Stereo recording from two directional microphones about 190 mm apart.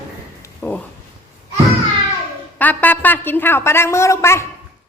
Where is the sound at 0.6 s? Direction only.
5° left (ahead or behind).